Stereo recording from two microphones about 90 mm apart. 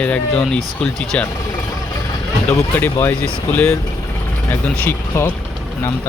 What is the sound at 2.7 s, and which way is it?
Speech, 25° left (ahead or behind).